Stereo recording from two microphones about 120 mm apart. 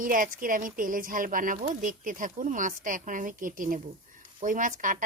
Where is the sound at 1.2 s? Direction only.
90° right.